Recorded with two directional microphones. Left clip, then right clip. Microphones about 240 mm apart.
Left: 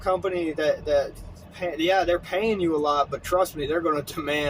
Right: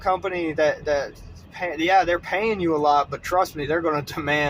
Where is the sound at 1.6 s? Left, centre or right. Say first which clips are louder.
Right 3 dB; centre.